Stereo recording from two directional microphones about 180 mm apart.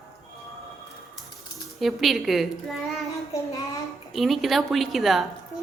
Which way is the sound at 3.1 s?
20° left (ahead or behind).